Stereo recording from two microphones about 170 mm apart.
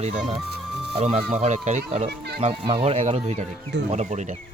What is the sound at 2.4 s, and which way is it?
Speech, 35° right (ahead or behind).